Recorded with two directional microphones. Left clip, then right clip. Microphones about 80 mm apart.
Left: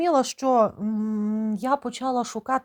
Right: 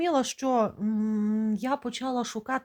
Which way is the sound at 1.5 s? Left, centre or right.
Left.